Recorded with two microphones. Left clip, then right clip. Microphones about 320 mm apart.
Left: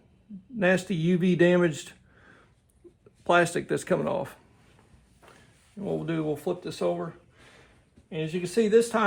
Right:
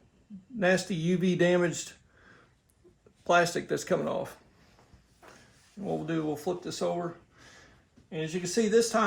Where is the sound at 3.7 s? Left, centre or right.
Left.